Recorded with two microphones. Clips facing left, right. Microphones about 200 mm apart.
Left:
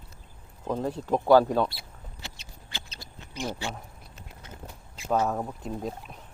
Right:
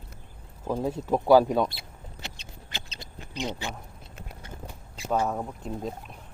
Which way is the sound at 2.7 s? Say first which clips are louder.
Right 2 dB; 20° right (ahead or behind).